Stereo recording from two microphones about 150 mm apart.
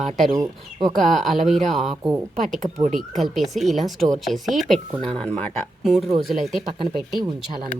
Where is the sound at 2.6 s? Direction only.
60° right (ahead or behind).